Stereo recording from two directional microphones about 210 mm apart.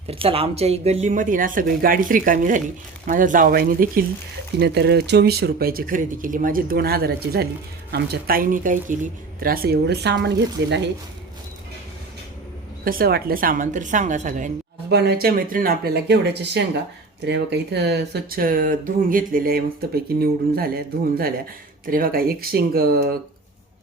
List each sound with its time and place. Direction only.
0.1 s speech: 25° right (ahead or behind); by 10.8 s 55° right (ahead or behind)
12.8 s speech: 45° right (ahead or behind)
14.8 s speech: 50° right (ahead or behind)